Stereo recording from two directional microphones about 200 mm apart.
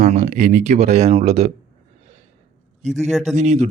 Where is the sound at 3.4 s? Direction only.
35° right (ahead or behind).